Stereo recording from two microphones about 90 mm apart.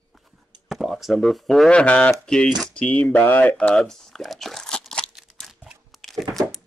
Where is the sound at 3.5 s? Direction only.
10° left (ahead or behind).